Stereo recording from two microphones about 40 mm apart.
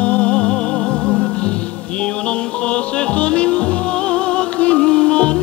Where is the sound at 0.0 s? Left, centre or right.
Left.